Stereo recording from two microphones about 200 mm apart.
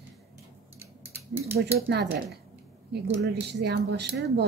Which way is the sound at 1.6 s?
55° right (ahead or behind).